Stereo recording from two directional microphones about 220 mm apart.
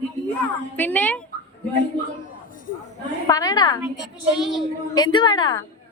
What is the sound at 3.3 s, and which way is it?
Speech, 15° left (ahead or behind).